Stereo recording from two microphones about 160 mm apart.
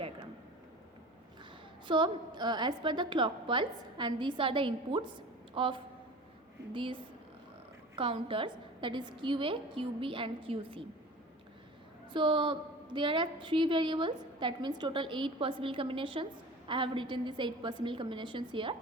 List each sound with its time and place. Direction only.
1.9 s a woman's voice: 30° right (ahead or behind)
12.1 s a woman's voice: 30° right (ahead or behind)